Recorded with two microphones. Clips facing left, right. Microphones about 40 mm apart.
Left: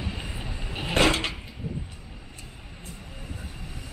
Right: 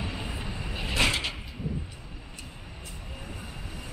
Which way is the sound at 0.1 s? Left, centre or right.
Centre.